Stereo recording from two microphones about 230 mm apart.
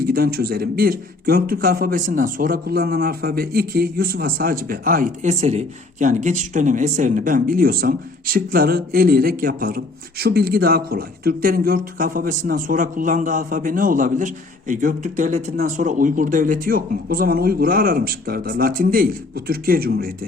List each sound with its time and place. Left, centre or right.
0.0 s a man's voice: right